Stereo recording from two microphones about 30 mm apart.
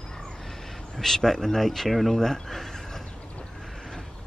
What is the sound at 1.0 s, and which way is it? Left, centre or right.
Speech, centre.